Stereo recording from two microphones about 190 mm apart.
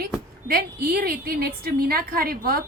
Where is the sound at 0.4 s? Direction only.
50° right (ahead or behind).